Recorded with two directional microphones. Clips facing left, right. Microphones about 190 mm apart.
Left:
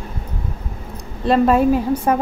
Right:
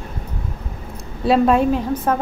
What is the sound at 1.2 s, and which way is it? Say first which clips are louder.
Speech: left 1 dB; centre (ahead or behind).